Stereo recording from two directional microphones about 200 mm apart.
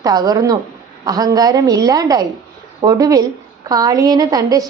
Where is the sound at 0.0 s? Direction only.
20° right (ahead or behind).